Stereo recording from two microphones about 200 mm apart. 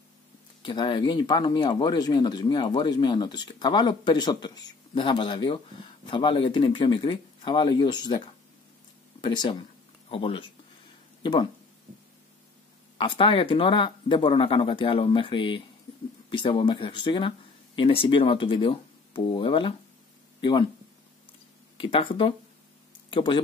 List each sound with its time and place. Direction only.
0.6 s speech: 25° left (ahead or behind)
9.2 s speech: 25° left (ahead or behind)
12.9 s speech: 25° left (ahead or behind)
21.7 s speech: 25° left (ahead or behind)